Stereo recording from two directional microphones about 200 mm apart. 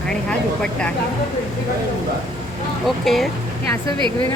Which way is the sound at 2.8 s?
Centre (ahead or behind).